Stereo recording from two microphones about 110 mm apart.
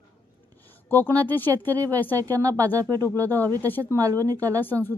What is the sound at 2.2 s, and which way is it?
Speech, 30° right (ahead or behind).